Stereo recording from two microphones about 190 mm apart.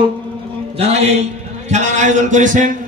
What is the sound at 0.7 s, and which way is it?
A man's voice, 35° right (ahead or behind).